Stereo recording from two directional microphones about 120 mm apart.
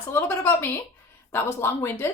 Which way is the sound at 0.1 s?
20° left (ahead or behind).